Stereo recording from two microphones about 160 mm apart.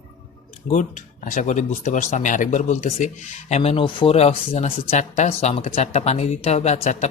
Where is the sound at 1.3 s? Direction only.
50° left (ahead or behind).